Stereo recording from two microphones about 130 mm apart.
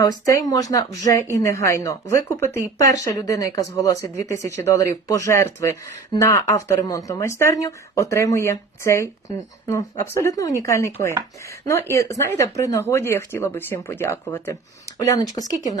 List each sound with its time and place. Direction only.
0.0 s speech: 30° left (ahead or behind)